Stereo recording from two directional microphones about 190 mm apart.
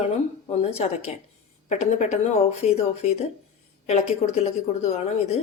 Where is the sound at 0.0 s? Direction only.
35° left (ahead or behind).